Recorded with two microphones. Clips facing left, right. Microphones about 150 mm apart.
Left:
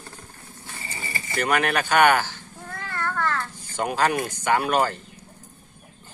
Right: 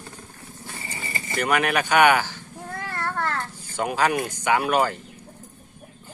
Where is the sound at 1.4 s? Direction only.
5° right (ahead or behind).